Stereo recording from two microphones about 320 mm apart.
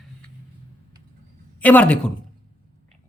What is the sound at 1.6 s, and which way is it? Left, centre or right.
Speech, centre.